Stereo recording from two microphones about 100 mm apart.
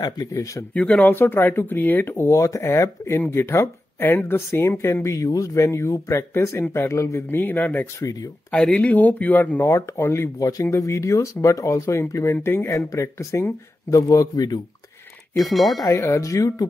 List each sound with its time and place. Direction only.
0.0 s speech: 35° left (ahead or behind)
0.7 s speech: 15° left (ahead or behind)
8.0 s speech: 40° left (ahead or behind)
8.5 s speech: 5° left (ahead or behind)
9.7 s speech: 30° left (ahead or behind)
15.3 s speech: centre (ahead or behind)
15.8 s speech: 30° left (ahead or behind)